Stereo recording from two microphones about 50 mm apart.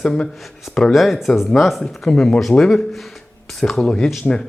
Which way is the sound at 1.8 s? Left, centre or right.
Centre.